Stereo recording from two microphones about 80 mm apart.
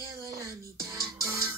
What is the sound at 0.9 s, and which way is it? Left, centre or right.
Music, right.